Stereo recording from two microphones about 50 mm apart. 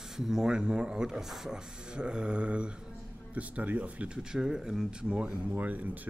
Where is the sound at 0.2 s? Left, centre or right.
Centre.